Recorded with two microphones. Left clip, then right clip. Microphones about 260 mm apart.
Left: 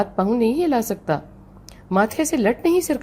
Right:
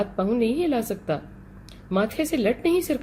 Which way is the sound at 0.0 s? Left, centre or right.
Left.